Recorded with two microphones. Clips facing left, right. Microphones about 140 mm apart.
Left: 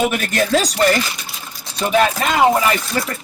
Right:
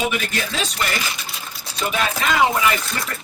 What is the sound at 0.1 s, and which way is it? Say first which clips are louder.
Speech: left 8 dB; 50° left (ahead or behind).